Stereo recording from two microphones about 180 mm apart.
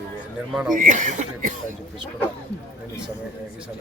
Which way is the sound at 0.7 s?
45° right (ahead or behind).